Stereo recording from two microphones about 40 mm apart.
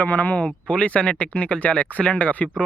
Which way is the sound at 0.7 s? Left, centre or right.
Left.